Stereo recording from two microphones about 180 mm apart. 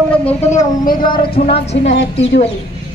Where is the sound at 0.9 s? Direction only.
25° left (ahead or behind).